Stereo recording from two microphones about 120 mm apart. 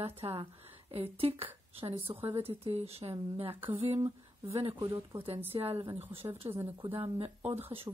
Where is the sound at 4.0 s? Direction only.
25° right (ahead or behind).